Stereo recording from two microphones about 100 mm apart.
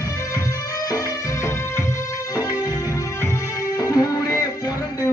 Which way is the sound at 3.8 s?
40° left (ahead or behind).